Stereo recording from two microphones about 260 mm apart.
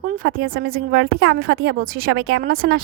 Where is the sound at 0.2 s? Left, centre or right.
Right.